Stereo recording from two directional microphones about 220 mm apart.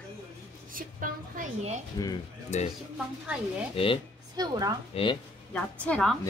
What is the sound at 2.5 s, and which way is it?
Speech, 30° left (ahead or behind).